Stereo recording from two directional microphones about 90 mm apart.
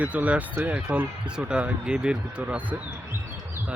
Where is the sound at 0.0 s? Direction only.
15° right (ahead or behind).